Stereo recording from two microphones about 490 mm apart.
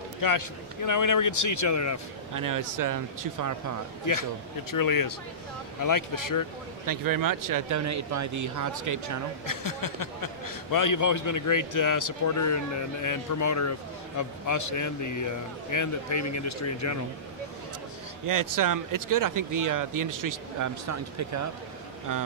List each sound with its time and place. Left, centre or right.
0.2 s a man's voice: left
2.3 s speech: right
4.0 s a man's voice: left
6.9 s speech: right
9.5 s a man's voice: left
18.2 s speech: right